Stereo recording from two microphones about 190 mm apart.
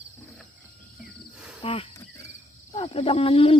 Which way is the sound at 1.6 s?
30° left (ahead or behind).